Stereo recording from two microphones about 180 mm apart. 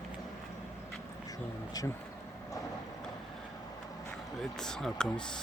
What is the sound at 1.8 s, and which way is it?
Speech, 20° left (ahead or behind).